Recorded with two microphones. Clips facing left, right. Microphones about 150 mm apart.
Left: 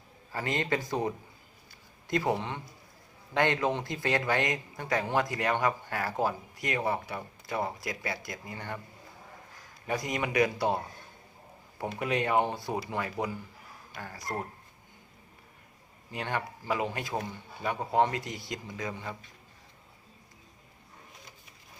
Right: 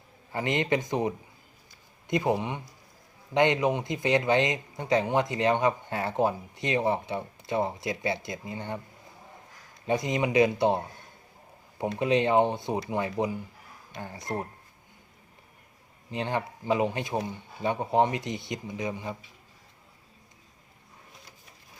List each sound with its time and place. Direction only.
0.3 s a man's voice: 20° right (ahead or behind)
9.8 s a man's voice: 25° right (ahead or behind)
11.9 s a man's voice: 20° right (ahead or behind)
16.1 s a man's voice: 25° right (ahead or behind)